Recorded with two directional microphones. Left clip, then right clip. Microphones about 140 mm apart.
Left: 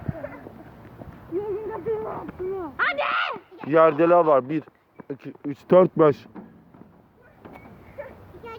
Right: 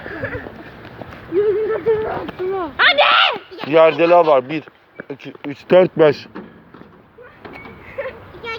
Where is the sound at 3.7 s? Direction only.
65° left (ahead or behind); by 4.6 s 80° left.